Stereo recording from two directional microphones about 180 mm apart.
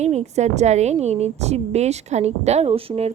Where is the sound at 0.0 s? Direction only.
40° right (ahead or behind).